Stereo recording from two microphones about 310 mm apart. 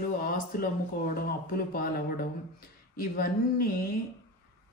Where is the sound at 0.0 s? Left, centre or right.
Left.